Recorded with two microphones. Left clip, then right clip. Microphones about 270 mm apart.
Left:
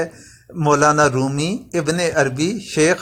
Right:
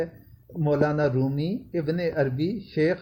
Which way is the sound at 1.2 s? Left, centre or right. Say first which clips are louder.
Left 7 dB; left.